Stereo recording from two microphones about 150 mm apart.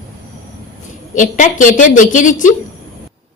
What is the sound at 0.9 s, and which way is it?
A woman's voice, 60° left (ahead or behind).